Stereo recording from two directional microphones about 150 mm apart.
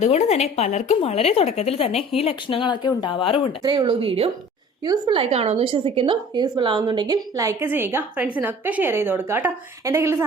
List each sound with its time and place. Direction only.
0.0 s speech: 45° left (ahead or behind)
3.6 s speech: 30° right (ahead or behind)
4.8 s a woman's voice: 25° right (ahead or behind)
5.2 s a woman's voice: 40° right (ahead or behind); by 10.2 s 15° right (ahead or behind)